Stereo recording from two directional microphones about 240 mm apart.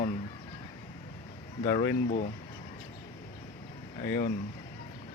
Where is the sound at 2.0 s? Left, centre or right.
Left.